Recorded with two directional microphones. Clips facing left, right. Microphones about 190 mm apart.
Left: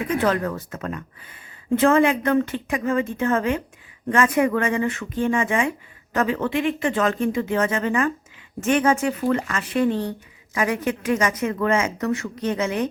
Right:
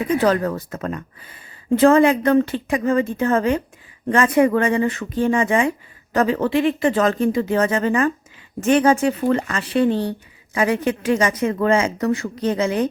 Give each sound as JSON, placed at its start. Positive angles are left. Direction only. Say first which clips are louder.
{"t": 0.2, "sound": "speech", "louder": "right 4 dB", "side_deg": -40}